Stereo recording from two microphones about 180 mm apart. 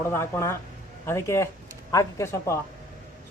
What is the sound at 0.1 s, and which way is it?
Speech, 15° left (ahead or behind).